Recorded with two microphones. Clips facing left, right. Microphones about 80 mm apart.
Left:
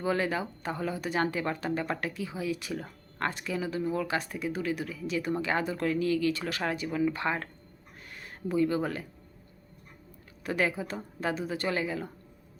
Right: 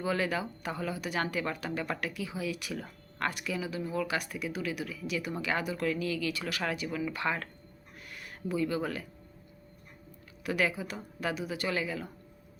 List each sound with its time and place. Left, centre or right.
0.0 s speech: left
8.0 s a sound: left
10.4 s speech: left